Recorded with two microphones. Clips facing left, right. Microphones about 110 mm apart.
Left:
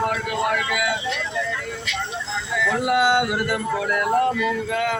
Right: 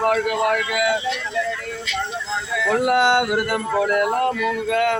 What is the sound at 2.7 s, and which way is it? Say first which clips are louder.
Music: right 2 dB; 50° right (ahead or behind).